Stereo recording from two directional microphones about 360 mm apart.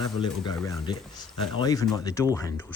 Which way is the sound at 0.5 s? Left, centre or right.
Centre.